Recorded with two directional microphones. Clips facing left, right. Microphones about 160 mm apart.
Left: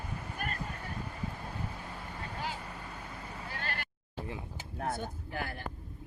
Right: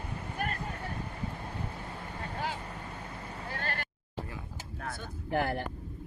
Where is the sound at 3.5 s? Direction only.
45° right (ahead or behind).